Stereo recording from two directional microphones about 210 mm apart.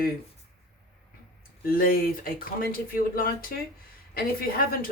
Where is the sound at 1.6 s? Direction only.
45° left (ahead or behind).